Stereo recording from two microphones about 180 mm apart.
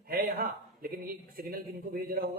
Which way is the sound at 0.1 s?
55° right (ahead or behind).